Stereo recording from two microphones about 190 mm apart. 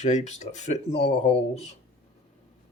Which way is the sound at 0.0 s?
35° left (ahead or behind).